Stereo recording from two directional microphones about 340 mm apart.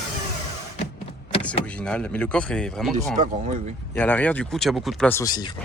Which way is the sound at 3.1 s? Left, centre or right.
Right.